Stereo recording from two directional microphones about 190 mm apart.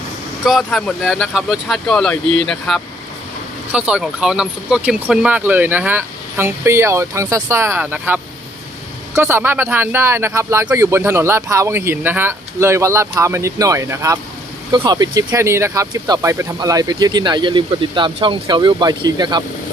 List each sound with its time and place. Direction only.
0.4 s a man's voice: centre (ahead or behind); by 19.4 s 20° right (ahead or behind)